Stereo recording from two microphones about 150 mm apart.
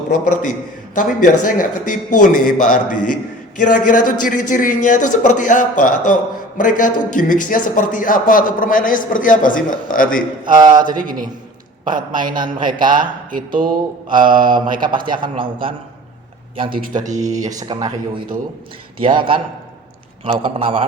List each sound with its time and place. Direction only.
0.1 s a man's voice: 60° left (ahead or behind)
10.5 s speech: 30° right (ahead or behind)
10.9 s speech: 65° right (ahead or behind)
12.1 s speech: 30° right (ahead or behind)
14.3 s mantra: 65° right (ahead or behind)
14.5 s speech: 30° right (ahead or behind)
17.0 s speech: 55° right (ahead or behind)
17.4 s speech: 25° right (ahead or behind)
19.0 s speech: 35° right (ahead or behind)